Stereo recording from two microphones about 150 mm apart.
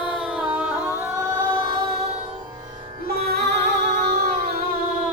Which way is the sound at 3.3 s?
90° right.